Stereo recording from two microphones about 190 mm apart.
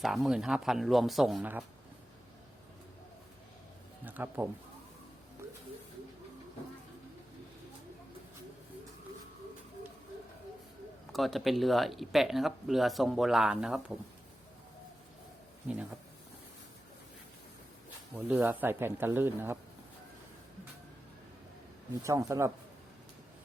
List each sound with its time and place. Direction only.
0.0 s speech: centre (ahead or behind)
4.0 s speech: 10° right (ahead or behind)
11.1 s speech: centre (ahead or behind)
18.3 s speech: 10° right (ahead or behind)
22.0 s speech: 15° right (ahead or behind)